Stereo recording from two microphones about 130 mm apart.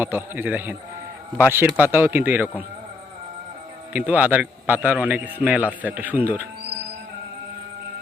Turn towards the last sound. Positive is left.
turn(degrees=-15)  # may be behind; listen again after turning